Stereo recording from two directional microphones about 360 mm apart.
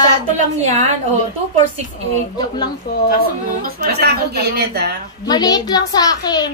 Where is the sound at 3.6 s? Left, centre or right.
Right.